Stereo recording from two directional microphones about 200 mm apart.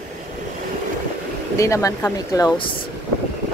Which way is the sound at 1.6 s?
15° left (ahead or behind).